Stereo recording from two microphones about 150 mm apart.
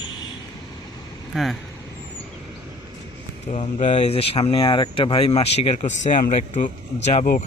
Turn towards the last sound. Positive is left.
turn(degrees=55)  # may be behind; listen again after turning